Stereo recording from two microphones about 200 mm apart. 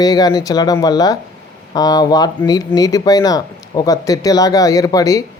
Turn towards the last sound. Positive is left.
turn(degrees=15)  # may be behind; listen again after turning